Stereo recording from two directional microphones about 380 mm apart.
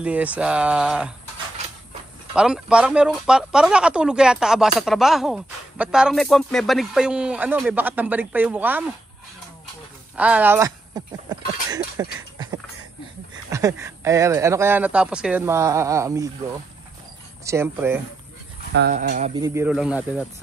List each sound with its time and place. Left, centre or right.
0.0 s speech: centre
2.3 s speech: centre
10.1 s speech: centre
17.5 s speech: centre
18.7 s speech: right; by 20.2 s centre